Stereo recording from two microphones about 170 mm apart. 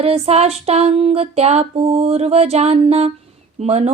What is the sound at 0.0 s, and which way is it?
Mantra, 35° right (ahead or behind).